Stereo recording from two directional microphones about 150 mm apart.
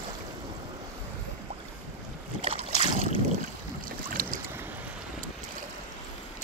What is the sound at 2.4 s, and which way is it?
Boat, 45° right (ahead or behind).